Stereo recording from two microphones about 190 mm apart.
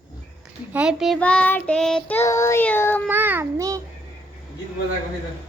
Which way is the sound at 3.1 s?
10° right (ahead or behind).